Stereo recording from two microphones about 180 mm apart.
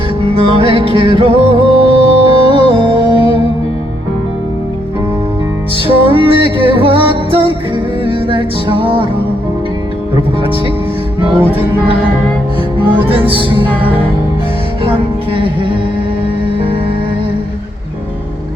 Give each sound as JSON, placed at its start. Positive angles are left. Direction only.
{"t": 0.3, "sound": "music", "side_deg": -30}
{"t": 6.1, "sound": "music", "side_deg": -30}
{"t": 13.1, "sound": "music", "side_deg": -30}
{"t": 15.3, "sound": "music", "side_deg": -30}